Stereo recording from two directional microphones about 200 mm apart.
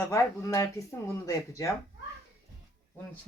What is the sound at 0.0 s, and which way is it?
Speech, 15° left (ahead or behind).